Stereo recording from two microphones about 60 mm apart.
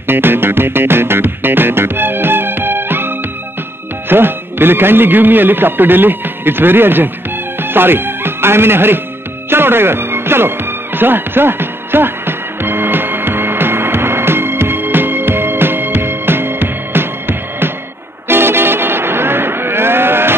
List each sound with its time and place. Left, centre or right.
0.0 s music: right
4.1 s a man's voice: right
9.5 s music: right